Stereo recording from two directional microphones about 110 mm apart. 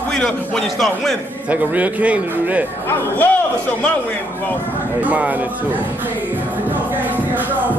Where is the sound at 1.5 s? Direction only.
15° right (ahead or behind).